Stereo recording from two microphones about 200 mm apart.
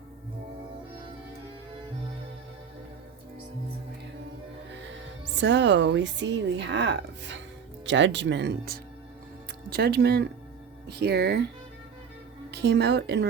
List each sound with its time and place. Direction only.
4.7 s speech: 65° right (ahead or behind)
12.5 s a woman's voice: 55° right (ahead or behind)